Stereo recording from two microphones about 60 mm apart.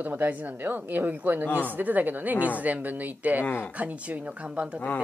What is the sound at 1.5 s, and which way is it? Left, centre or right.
Speech, left.